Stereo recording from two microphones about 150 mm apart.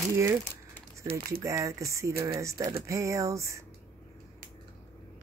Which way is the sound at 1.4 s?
20° right (ahead or behind).